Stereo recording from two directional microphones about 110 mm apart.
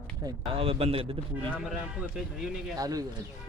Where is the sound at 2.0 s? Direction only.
5° right (ahead or behind).